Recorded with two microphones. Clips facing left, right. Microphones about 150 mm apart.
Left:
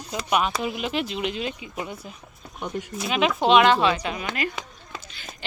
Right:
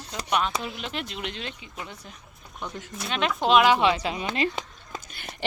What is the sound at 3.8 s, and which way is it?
Speech, 25° right (ahead or behind).